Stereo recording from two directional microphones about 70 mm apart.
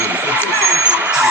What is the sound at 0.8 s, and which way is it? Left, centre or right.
Vehicle, centre.